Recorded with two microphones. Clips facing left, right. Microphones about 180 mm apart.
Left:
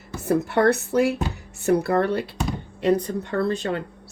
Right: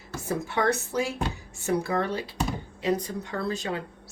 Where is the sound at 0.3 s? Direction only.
65° left (ahead or behind).